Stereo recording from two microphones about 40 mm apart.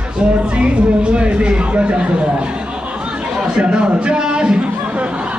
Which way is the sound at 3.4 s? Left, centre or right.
Right.